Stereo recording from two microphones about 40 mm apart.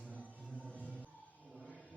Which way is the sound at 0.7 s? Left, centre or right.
Left.